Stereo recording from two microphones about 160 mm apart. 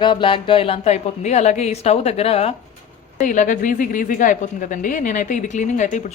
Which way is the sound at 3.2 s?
55° left (ahead or behind).